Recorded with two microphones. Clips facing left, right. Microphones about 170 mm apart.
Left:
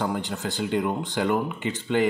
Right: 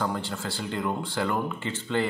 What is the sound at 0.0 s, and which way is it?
Speech, 20° left (ahead or behind).